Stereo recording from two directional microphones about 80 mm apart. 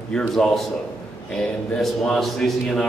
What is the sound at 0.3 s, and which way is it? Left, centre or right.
Speech, centre.